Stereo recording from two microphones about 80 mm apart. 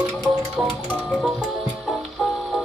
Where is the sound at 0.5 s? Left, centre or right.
Centre.